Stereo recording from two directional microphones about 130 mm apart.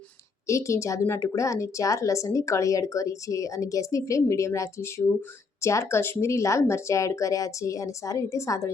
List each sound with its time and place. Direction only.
0.4 s a woman's voice: 25° left (ahead or behind)